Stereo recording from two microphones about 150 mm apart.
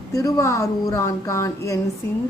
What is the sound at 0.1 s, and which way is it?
A woman's voice, 25° left (ahead or behind).